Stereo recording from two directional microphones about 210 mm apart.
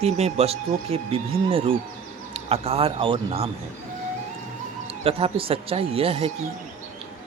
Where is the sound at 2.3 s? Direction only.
30° right (ahead or behind).